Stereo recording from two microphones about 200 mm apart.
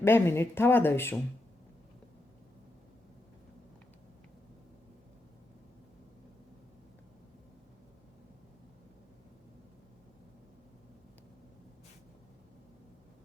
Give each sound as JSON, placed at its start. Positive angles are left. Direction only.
{"t": 0.0, "sound": "speech", "side_deg": 10}